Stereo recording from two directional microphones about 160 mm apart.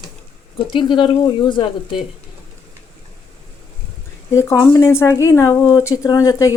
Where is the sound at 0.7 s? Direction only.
30° left (ahead or behind).